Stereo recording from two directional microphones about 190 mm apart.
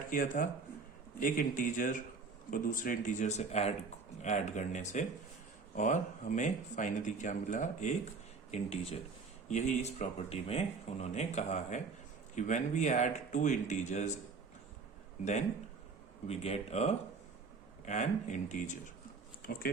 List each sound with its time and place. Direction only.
0.1 s speech: 45° left (ahead or behind)
15.2 s speech: 35° left (ahead or behind)
19.4 s speech: 50° left (ahead or behind)